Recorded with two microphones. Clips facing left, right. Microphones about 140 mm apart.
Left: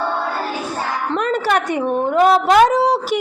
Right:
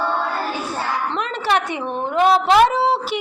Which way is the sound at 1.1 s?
45° left (ahead or behind).